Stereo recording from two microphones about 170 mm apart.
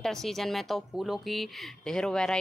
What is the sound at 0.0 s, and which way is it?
Speech, centre (ahead or behind).